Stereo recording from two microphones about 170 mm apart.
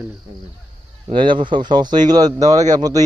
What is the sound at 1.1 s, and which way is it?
Speech, 30° right (ahead or behind).